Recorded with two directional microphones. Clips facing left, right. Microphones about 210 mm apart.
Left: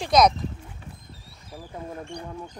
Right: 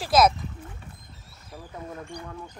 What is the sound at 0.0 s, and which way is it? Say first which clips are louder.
Speech: left 1 dB; 5° right (ahead or behind).